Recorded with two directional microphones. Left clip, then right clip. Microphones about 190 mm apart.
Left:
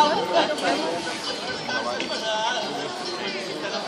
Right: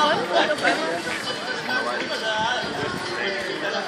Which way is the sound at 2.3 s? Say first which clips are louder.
Right 1 dB; 50° right (ahead or behind).